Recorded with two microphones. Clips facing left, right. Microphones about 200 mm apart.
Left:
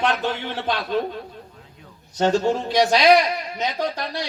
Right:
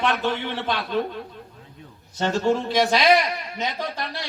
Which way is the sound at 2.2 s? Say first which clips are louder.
Left 2 dB; 15° left (ahead or behind).